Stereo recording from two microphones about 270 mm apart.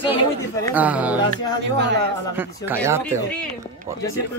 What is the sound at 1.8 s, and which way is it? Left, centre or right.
Speech, right.